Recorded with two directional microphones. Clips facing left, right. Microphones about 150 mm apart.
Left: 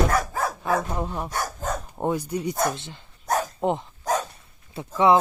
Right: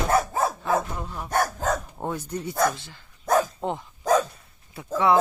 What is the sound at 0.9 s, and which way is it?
Speech, 35° left (ahead or behind).